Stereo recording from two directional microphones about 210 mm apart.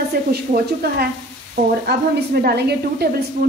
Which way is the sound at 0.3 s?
50° right (ahead or behind).